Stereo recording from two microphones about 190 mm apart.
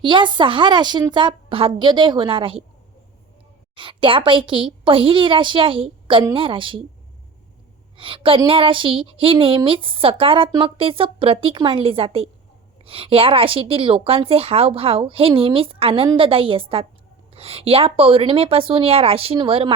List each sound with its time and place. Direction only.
0.0 s a woman's voice: 25° right (ahead or behind)
3.8 s a woman's voice: 25° right (ahead or behind)
7.9 s a woman's voice: 30° right (ahead or behind)